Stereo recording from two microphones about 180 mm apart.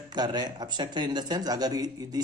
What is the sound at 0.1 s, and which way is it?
Speech, 20° right (ahead or behind).